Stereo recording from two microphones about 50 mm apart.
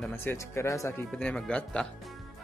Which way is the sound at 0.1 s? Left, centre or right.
Left.